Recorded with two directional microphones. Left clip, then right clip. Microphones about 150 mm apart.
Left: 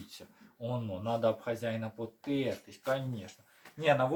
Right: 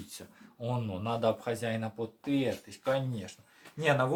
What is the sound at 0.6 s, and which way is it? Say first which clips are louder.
Speech: right 1 dB; 45° right (ahead or behind).